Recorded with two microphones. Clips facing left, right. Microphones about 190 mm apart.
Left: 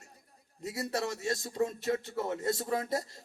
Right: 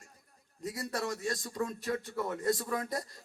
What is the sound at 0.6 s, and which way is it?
A man's voice, 25° left (ahead or behind).